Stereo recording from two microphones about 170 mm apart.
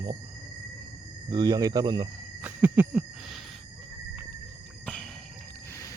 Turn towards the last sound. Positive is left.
turn(degrees=5)  # may be behind; listen again after turning